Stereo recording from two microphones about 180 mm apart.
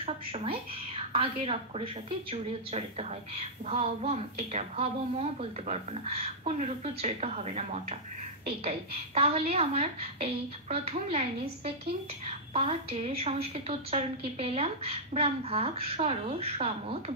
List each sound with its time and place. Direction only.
0.0 s a woman's voice: 30° right (ahead or behind)